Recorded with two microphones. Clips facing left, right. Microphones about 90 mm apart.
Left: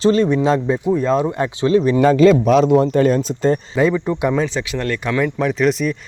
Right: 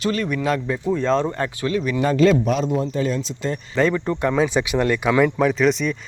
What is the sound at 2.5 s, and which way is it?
Speech, 80° left.